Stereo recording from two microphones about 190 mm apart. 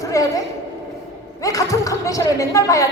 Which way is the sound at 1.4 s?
15° left (ahead or behind).